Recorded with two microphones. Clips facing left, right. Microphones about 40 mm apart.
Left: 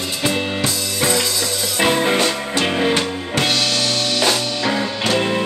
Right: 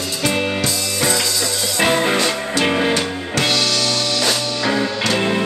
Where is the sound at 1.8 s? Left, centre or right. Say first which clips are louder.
Even; centre.